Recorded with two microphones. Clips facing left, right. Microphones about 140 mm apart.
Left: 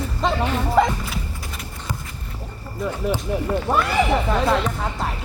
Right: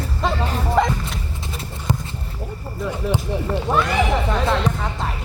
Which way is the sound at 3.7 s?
5° left (ahead or behind).